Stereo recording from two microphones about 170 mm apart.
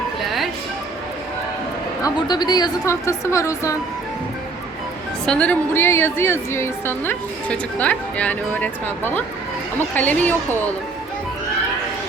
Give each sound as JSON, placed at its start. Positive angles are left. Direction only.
{"t": 2.0, "sound": "a woman's voice", "side_deg": 25}
{"t": 5.2, "sound": "a woman's voice", "side_deg": 5}